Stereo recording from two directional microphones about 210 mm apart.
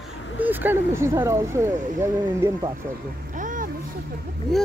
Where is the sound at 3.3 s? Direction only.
40° right (ahead or behind).